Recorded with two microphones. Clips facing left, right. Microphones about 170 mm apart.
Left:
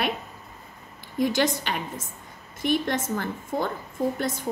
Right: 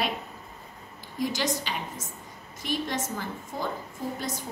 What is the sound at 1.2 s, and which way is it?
A woman's voice, 60° left (ahead or behind).